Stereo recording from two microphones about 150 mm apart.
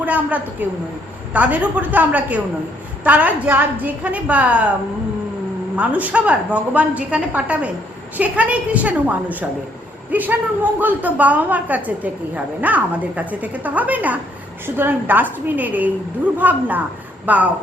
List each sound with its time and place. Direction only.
0.0 s a woman's voice: 10° right (ahead or behind)
5.7 s a woman's voice: 10° right (ahead or behind)